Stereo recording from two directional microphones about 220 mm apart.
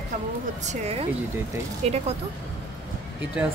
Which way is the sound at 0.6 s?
30° right (ahead or behind).